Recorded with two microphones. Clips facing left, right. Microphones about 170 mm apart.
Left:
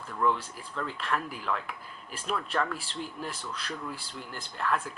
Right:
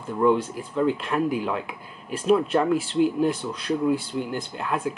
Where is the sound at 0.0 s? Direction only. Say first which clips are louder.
Right 8 dB; 25° right (ahead or behind).